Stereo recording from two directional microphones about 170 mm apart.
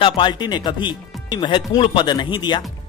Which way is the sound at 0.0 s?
25° left (ahead or behind).